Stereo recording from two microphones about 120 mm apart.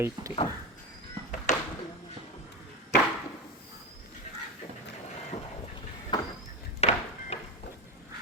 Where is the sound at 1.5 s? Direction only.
90° left.